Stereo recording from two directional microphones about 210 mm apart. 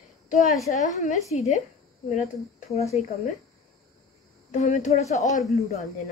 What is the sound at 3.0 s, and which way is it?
Speech, 35° left (ahead or behind).